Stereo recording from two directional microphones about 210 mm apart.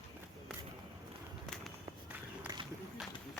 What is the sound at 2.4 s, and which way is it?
Run, 20° right (ahead or behind).